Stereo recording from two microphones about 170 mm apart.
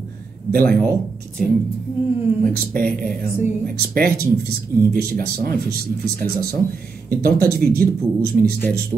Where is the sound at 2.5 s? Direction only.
60° right (ahead or behind).